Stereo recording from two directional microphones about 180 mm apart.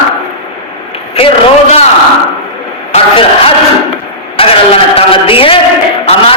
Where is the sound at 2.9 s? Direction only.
30° left (ahead or behind).